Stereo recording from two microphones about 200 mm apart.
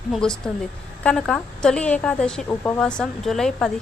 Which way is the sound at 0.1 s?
5° left (ahead or behind).